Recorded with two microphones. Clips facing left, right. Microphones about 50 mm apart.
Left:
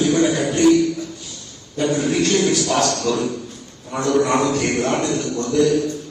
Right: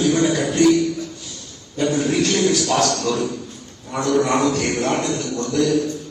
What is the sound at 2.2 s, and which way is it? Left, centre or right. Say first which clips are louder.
A man's voice: left 1 dB; left.